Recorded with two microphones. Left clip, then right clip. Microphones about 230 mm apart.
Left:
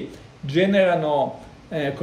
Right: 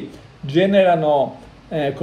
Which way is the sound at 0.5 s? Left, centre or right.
Centre.